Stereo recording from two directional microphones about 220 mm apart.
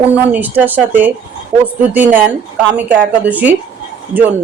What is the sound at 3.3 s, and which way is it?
Speech, 5° right (ahead or behind).